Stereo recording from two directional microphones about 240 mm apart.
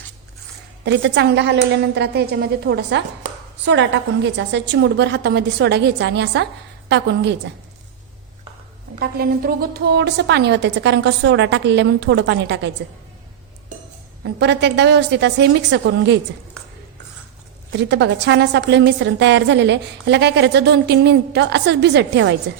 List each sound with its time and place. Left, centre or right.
0.9 s a woman's voice: right
9.0 s a woman's voice: right
14.3 s a woman's voice: right
17.7 s a woman's voice: right